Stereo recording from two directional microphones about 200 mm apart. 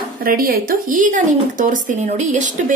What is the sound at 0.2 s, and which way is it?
Speech, 45° right (ahead or behind).